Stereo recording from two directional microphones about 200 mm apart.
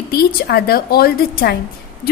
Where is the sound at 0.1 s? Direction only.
50° left (ahead or behind).